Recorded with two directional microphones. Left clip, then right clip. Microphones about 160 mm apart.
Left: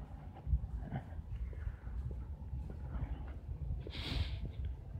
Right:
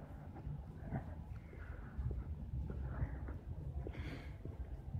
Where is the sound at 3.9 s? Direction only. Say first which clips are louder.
Left 8 dB; 50° left (ahead or behind).